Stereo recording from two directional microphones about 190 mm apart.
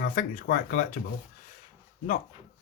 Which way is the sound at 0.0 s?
45° left (ahead or behind).